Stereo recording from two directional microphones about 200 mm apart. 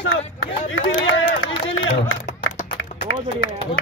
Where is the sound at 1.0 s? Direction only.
80° left.